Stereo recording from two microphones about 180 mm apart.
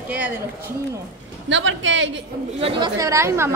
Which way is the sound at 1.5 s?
90° right.